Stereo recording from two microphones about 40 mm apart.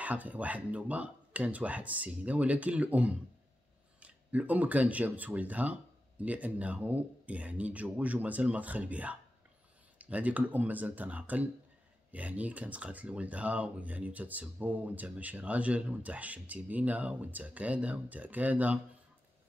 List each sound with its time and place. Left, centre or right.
0.0 s speech: right